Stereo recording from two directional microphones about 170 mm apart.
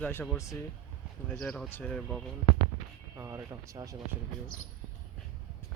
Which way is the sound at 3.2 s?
15° right (ahead or behind).